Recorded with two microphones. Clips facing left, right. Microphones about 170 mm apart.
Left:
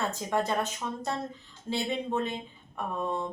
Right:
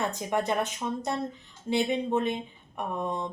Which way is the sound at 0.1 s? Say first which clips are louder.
Right 1 dB; 15° right (ahead or behind).